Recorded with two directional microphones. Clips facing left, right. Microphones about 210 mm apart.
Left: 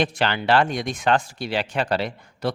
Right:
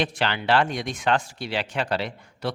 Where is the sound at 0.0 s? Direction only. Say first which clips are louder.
Left 3 dB; 45° left (ahead or behind).